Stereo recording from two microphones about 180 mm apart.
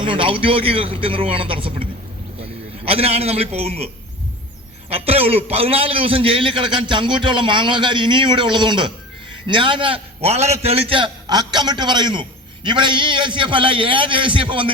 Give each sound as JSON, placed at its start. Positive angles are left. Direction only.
{"t": 0.0, "sound": "a man's voice", "side_deg": -30}
{"t": 4.9, "sound": "a man's voice", "side_deg": -35}